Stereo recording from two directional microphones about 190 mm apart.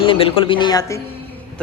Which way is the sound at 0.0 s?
30° left (ahead or behind).